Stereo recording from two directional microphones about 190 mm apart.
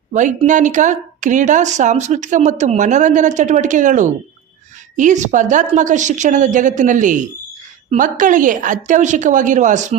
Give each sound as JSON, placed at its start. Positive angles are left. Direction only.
{"t": 0.1, "sound": "a woman's voice", "side_deg": -40}